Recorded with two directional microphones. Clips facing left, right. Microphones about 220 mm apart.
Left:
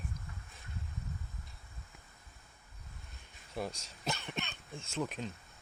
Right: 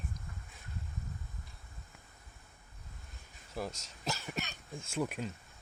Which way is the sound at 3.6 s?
Centre (ahead or behind).